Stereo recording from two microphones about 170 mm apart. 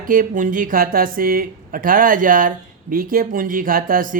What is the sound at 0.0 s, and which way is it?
Speech, 55° right (ahead or behind).